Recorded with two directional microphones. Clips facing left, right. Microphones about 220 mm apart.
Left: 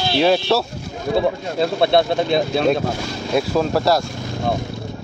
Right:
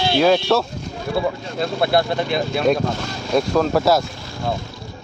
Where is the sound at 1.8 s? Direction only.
25° left (ahead or behind).